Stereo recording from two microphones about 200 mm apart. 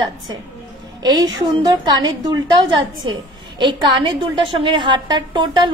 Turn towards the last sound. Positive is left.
turn(degrees=-20)  # may be behind; listen again after turning